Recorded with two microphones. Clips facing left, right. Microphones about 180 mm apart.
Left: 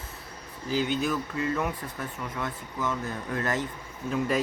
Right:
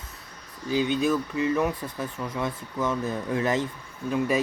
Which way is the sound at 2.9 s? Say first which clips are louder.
Right 5 dB; 10° right (ahead or behind).